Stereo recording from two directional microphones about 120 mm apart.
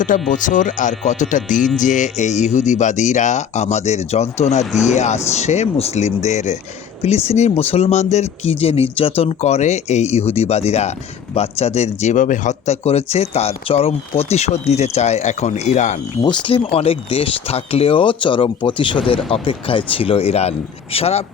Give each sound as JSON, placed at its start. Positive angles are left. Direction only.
{"t": 0.0, "sound": "speech", "side_deg": 90}
{"t": 4.6, "sound": "speech", "side_deg": 0}
{"t": 4.9, "sound": "speech", "side_deg": 75}
{"t": 7.3, "sound": "speech", "side_deg": 65}
{"t": 16.5, "sound": "speech", "side_deg": 55}